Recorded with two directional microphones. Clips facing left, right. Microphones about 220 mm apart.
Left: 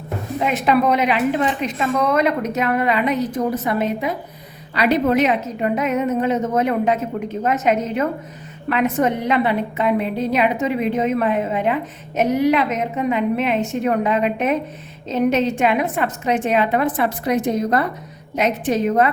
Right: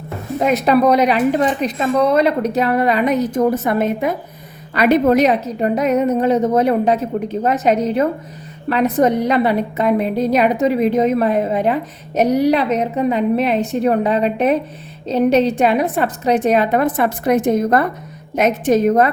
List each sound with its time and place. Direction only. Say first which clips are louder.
0.3 s a woman's voice: right 4 dB; 40° right (ahead or behind)